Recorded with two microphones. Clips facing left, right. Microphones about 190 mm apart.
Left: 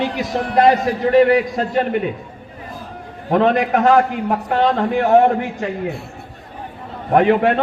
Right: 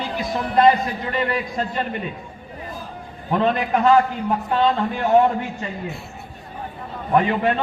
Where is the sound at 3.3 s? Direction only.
70° left (ahead or behind).